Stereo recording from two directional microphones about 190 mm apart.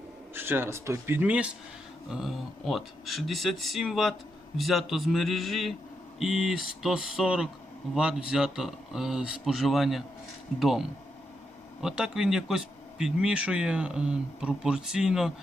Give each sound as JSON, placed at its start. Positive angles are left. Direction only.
{"t": 0.3, "sound": "speech", "side_deg": -10}